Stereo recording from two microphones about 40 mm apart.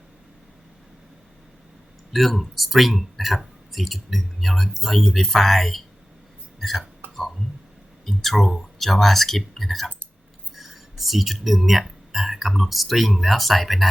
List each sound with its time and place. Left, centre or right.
2.1 s speech: centre
7.0 s a sound: right
8.0 s speech: centre